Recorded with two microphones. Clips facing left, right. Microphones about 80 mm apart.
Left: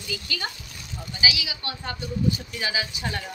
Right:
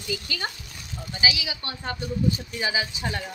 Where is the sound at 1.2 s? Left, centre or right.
Right.